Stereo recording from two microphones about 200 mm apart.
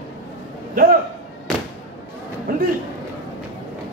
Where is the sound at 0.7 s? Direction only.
45° right (ahead or behind).